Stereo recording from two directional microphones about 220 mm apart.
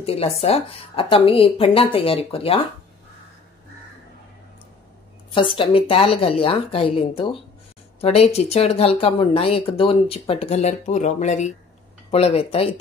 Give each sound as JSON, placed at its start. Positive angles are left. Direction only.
{"t": 0.0, "sound": "speech", "side_deg": 25}
{"t": 5.3, "sound": "speech", "side_deg": 20}